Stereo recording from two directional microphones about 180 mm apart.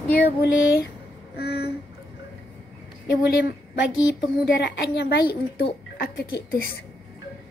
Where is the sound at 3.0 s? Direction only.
65° left (ahead or behind).